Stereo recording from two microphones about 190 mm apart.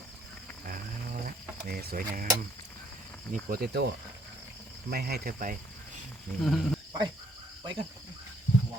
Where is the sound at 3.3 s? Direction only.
50° right (ahead or behind).